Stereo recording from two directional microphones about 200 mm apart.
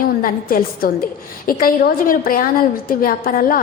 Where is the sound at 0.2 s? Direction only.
45° left (ahead or behind).